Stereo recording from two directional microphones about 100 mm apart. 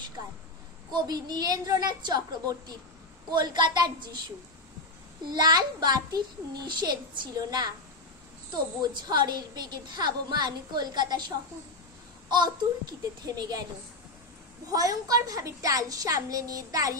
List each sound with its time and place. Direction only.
0.9 s a woman's voice: 45° right (ahead or behind)
5.3 s a woman's voice: 45° right (ahead or behind)
8.8 s a woman's voice: 45° right (ahead or behind)
14.7 s a woman's voice: 35° right (ahead or behind)